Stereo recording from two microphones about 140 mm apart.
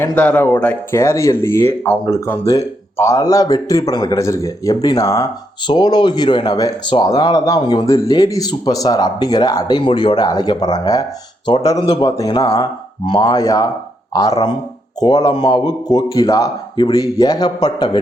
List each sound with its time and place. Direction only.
0.0 s a man's voice: 10° left (ahead or behind); by 18.0 s 30° left (ahead or behind)